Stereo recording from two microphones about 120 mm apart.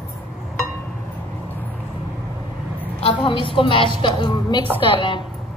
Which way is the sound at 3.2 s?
45° left (ahead or behind).